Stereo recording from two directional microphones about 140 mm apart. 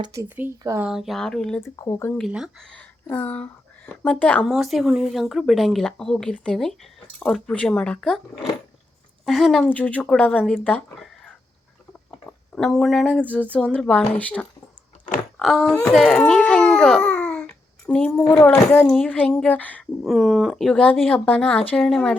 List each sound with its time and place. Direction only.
0.0 s speech: 20° right (ahead or behind)
0.8 s speech: 5° right (ahead or behind)
1.6 s speech: 20° left (ahead or behind)
2.1 s speech: centre (ahead or behind)
4.5 s speech: centre (ahead or behind)
9.2 s speech: centre (ahead or behind)
12.5 s speech: 5° left (ahead or behind)
15.4 s baby cry: centre (ahead or behind)
18.5 s speech: 10° left (ahead or behind)
20.1 s speech: centre (ahead or behind)